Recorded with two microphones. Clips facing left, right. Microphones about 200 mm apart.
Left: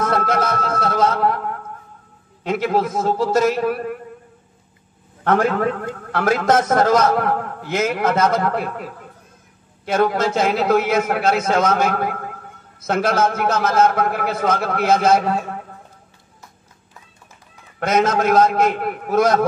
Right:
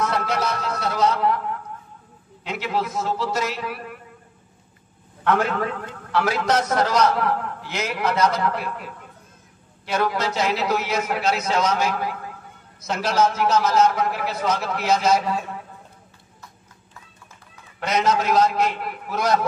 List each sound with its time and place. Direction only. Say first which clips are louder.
0.0 s music: left 4 dB; 50° left (ahead or behind)
2.4 s a man's voice: left 7 dB; 50° left (ahead or behind)
6.1 s a man's voice: left 4 dB; 50° left (ahead or behind)
9.8 s a man's voice: left 5 dB; 50° left (ahead or behind)
17.7 s a man's voice: left 4 dB; 50° left (ahead or behind)